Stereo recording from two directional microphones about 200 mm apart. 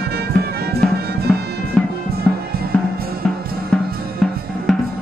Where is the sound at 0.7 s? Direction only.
50° right (ahead or behind).